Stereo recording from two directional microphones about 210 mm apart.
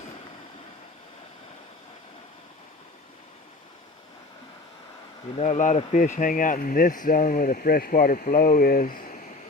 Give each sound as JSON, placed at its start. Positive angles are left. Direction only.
{"t": 5.4, "sound": "speech", "side_deg": 35}